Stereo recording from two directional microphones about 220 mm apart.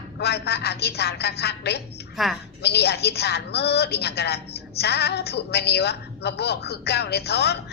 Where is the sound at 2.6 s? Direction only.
50° left (ahead or behind).